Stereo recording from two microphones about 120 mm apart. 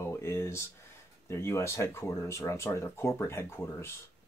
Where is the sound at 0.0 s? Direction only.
20° left (ahead or behind).